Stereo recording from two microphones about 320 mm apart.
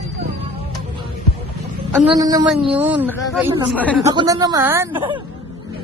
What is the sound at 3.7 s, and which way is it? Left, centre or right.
Speech, centre.